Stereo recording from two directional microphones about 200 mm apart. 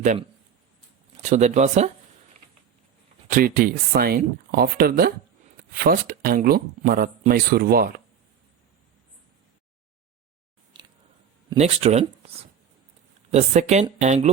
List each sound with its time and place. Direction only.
0.0 s speech: 35° right (ahead or behind)
3.2 s speech: 45° right (ahead or behind)
10.8 s a sound: 20° right (ahead or behind)
11.5 s speech: 30° right (ahead or behind)